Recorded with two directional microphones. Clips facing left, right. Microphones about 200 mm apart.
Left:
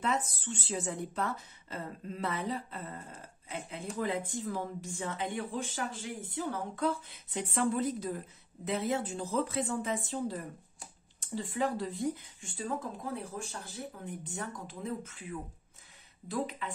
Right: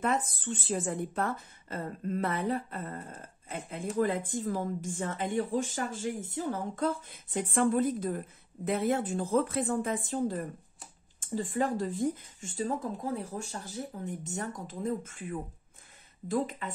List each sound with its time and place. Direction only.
0.0 s speech: 50° right (ahead or behind)